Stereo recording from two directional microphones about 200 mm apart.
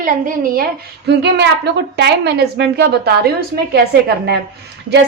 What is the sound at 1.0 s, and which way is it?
A woman's voice, 55° right (ahead or behind).